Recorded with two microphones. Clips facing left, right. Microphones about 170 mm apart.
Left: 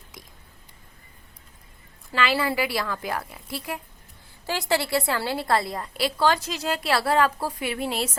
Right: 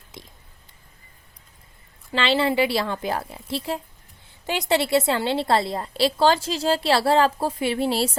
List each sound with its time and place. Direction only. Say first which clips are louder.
2.1 s a woman's voice: right 3 dB; 25° right (ahead or behind)